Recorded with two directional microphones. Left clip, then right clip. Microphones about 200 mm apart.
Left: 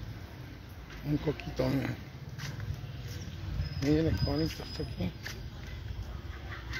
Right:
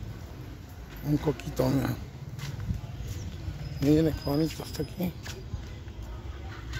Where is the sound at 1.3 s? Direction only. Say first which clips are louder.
Right 4 dB; 15° right (ahead or behind).